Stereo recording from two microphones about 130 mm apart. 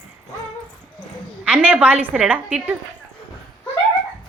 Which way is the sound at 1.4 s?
10° right (ahead or behind).